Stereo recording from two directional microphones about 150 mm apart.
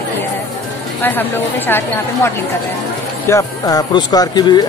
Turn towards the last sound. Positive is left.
turn(degrees=30)  # may be behind; listen again after turning